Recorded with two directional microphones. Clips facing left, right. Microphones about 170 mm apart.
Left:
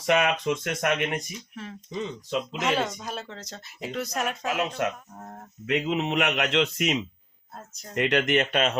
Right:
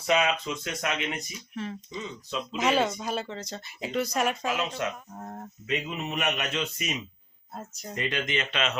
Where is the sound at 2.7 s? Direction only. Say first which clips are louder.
Right 2 dB; 5° right (ahead or behind).